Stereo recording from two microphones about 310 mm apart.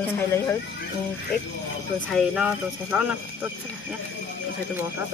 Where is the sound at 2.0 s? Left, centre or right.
Centre.